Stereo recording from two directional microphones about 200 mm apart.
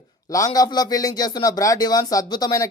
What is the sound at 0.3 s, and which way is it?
Speech, 15° left (ahead or behind).